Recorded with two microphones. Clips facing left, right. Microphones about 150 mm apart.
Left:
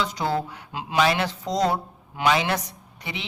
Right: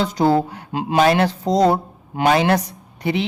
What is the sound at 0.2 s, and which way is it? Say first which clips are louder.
Speech: right 9 dB; 40° right (ahead or behind).